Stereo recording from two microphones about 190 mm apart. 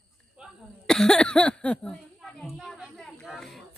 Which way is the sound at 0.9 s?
5° left (ahead or behind).